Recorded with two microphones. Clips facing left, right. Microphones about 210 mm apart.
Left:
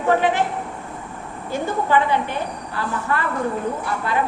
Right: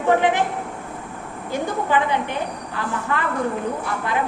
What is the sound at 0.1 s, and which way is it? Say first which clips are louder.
Speech: even; 15° right (ahead or behind).